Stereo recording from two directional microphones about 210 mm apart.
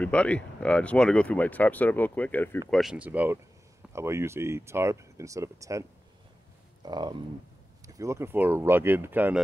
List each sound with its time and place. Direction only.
0.0 s speech: 5° left (ahead or behind)
2.7 s speech: centre (ahead or behind)